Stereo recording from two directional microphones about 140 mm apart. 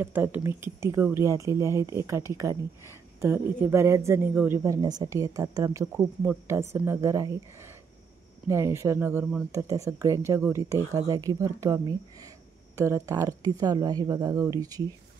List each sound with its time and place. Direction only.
0.0 s a man's voice: 15° right (ahead or behind)
4.8 s speech: 30° right (ahead or behind)
8.5 s speech: 20° right (ahead or behind)